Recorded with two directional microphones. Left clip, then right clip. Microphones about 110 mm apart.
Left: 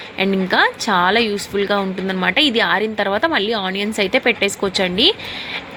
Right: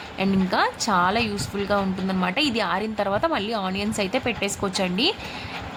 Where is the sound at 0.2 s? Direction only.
20° left (ahead or behind).